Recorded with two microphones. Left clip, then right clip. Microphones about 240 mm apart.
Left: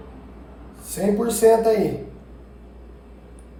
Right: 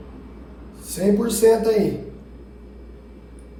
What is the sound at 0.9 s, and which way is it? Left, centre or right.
Speech, left.